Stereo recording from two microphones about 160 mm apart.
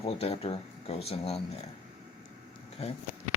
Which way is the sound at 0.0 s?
40° left (ahead or behind).